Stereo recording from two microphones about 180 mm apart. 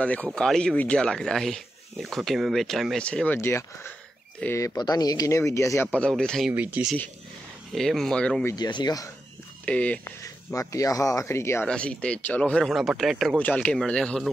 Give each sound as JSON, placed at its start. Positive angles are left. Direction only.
{"t": 0.0, "sound": "speech", "side_deg": 5}
{"t": 5.9, "sound": "speech", "side_deg": 5}
{"t": 6.5, "sound": "speech", "side_deg": -10}
{"t": 8.5, "sound": "speech", "side_deg": 25}
{"t": 9.7, "sound": "speech", "side_deg": 5}
{"t": 10.2, "sound": "speech", "side_deg": 20}
{"t": 13.4, "sound": "speech", "side_deg": 10}